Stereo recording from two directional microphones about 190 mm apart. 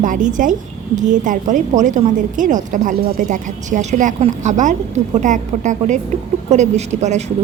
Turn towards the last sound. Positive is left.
turn(degrees=-35)  # may be behind; listen again after turning